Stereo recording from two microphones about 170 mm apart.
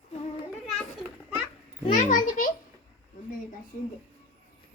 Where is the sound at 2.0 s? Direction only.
50° left (ahead or behind).